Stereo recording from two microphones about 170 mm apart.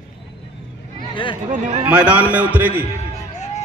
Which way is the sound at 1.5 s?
50° right (ahead or behind).